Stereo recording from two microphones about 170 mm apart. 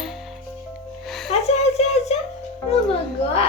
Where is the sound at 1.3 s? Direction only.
40° left (ahead or behind).